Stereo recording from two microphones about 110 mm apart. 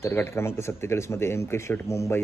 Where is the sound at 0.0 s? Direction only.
25° left (ahead or behind).